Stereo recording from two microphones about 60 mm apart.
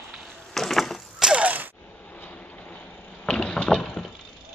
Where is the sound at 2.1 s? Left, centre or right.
Left; by 4.1 s centre.